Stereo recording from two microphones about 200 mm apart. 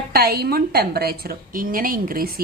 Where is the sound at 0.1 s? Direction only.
50° right (ahead or behind).